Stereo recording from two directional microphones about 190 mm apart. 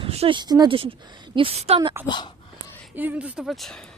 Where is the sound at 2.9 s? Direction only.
10° right (ahead or behind).